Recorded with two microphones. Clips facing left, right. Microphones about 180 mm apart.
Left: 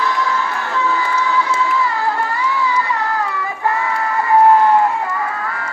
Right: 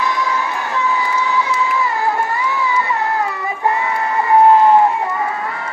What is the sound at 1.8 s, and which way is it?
Child singing, 20° right (ahead or behind).